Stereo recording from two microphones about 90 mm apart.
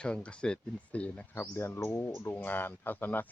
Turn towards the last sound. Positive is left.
turn(degrees=20)  # may be behind; listen again after turning